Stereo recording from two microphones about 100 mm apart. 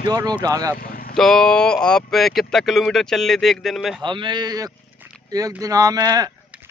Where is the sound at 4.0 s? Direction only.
50° right (ahead or behind).